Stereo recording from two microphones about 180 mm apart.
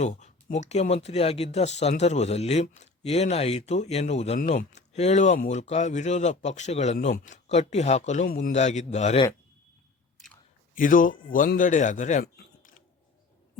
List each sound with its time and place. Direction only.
0.0 s speech: 40° left (ahead or behind)
10.8 s a man's voice: 50° left (ahead or behind)
12.2 s cutlery: 50° left (ahead or behind)